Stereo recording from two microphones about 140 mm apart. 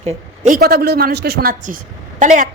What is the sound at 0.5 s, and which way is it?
A woman's voice, 90° right.